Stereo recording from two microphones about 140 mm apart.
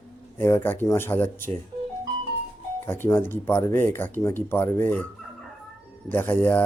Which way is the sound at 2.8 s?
15° left (ahead or behind).